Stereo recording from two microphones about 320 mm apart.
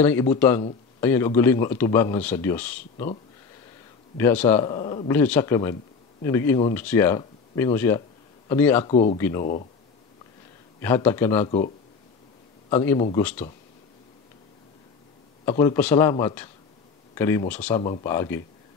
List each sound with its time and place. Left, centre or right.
0.0 s speech: centre
4.2 s speech: centre
8.9 s speech: centre
10.8 s speech: centre
12.6 s a man's voice: centre
15.4 s speech: centre